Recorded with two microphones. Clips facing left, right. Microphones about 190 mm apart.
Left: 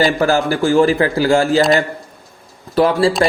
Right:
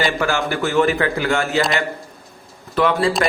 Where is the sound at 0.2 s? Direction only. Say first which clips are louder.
Left 5 dB; 35° left (ahead or behind).